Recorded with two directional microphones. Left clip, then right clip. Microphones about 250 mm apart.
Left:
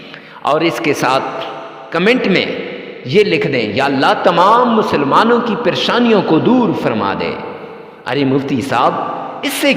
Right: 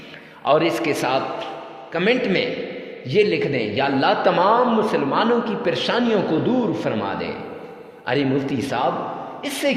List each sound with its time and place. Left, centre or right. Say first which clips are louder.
0.4 s a man's voice: left 4 dB; left